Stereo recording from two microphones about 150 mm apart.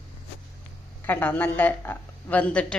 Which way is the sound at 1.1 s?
10° left (ahead or behind).